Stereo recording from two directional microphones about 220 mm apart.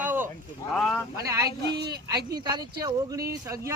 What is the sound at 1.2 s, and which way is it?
Speech, 15° right (ahead or behind).